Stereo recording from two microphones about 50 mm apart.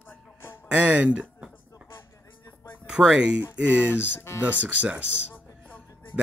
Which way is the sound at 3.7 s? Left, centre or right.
Left.